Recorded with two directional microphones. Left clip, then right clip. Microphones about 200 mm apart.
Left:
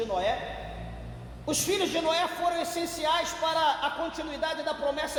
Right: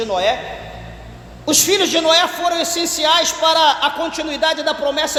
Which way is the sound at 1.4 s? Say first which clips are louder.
Right 13 dB; 40° right (ahead or behind).